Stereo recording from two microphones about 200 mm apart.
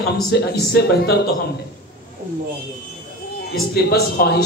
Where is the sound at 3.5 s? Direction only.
55° left (ahead or behind).